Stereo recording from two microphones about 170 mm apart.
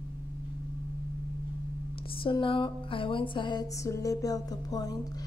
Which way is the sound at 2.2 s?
30° left (ahead or behind).